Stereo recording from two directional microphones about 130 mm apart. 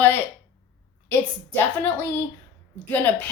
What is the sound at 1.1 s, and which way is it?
A woman's voice, 15° left (ahead or behind).